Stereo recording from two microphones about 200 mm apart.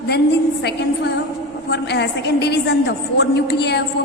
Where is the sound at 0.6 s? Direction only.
55° left (ahead or behind).